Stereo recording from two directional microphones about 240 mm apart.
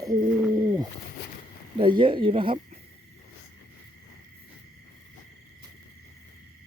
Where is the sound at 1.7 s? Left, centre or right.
Right.